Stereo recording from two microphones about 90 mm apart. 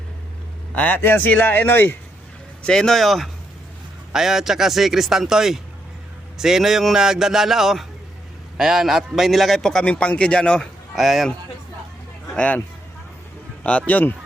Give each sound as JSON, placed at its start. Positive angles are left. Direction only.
{"t": 0.8, "sound": "speech", "side_deg": 20}
{"t": 2.6, "sound": "a man's voice", "side_deg": 5}
{"t": 10.9, "sound": "a man's voice", "side_deg": 0}
{"t": 12.3, "sound": "a man's voice", "side_deg": 15}
{"t": 13.7, "sound": "a man's voice", "side_deg": 15}